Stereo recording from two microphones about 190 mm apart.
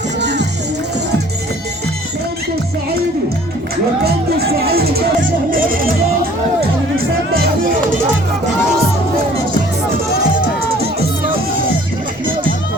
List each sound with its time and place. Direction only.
0.2 s music: 65° right (ahead or behind)
4.0 s speech: 55° right (ahead or behind)
5.5 s music: 50° right (ahead or behind)